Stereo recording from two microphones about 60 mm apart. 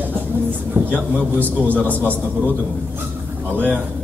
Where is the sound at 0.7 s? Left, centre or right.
Right.